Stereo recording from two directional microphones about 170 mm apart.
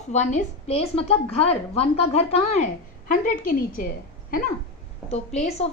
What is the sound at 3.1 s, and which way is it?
Speech, 55° left (ahead or behind).